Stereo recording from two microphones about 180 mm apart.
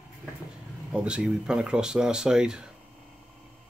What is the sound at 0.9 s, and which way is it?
Speech, 5° right (ahead or behind).